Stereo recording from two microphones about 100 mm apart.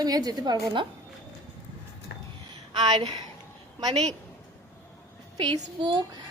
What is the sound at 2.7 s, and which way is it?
Speech, 50° right (ahead or behind).